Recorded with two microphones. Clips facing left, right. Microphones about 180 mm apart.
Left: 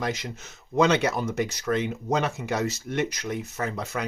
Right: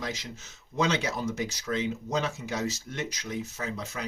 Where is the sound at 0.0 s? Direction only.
60° left (ahead or behind).